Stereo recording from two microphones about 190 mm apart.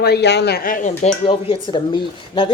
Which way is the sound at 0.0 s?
60° left (ahead or behind).